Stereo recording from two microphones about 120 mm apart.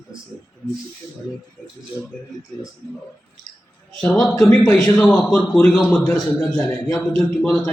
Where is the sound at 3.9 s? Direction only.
5° left (ahead or behind).